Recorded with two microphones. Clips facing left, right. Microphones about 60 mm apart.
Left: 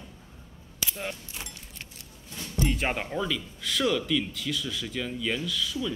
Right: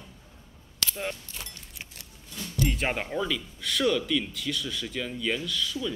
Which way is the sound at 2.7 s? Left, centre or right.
Centre.